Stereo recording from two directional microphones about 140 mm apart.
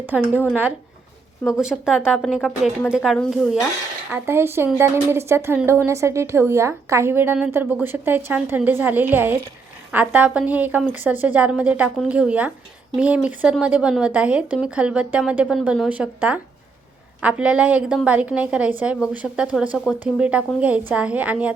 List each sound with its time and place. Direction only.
1.5 s speech: centre (ahead or behind)
4.1 s a woman's voice: 15° right (ahead or behind)